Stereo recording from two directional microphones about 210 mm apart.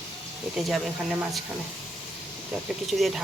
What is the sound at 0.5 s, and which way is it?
Speech, centre (ahead or behind).